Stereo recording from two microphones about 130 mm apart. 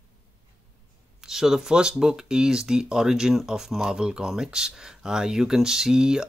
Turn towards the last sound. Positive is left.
turn(degrees=-5)  # may be behind; listen again after turning